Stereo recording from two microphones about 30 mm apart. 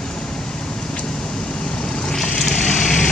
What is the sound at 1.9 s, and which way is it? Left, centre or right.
Vehicle, left.